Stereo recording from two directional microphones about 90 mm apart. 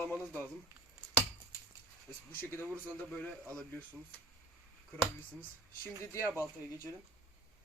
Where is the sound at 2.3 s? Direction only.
25° left (ahead or behind).